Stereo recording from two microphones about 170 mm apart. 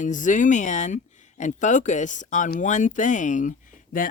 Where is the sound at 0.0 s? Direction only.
50° left (ahead or behind).